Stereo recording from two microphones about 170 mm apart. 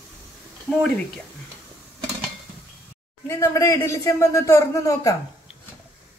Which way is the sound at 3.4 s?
20° left (ahead or behind).